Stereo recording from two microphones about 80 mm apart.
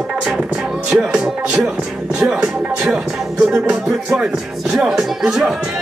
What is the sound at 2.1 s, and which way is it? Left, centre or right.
Speech, centre.